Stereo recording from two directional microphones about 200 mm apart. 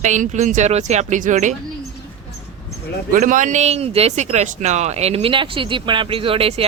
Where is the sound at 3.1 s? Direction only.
40° right (ahead or behind).